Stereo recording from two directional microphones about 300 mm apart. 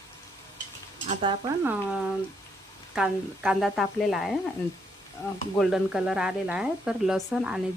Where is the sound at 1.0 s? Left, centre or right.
Centre.